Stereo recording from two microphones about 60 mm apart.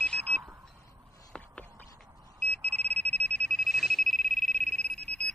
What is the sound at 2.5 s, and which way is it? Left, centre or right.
Alarm, left.